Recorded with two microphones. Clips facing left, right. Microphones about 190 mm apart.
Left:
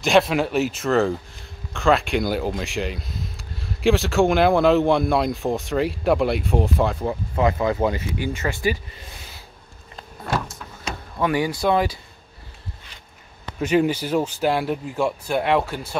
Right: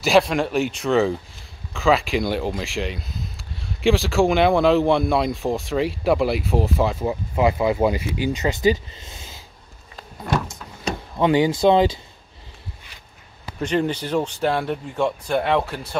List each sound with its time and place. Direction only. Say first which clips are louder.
0.0 s speech: even; centre (ahead or behind); by 9.3 s 25° right (ahead or behind)
10.9 s speech: right 4 dB; 20° right (ahead or behind)
13.6 s speech: left 3 dB; 5° left (ahead or behind)